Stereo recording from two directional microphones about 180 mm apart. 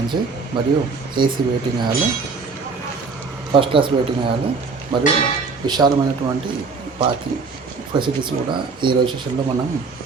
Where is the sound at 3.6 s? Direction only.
30° right (ahead or behind).